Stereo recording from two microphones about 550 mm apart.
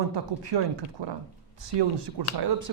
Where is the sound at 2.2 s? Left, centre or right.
Right.